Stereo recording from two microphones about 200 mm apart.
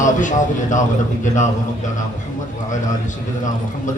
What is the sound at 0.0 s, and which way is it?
A man's voice, 40° left (ahead or behind).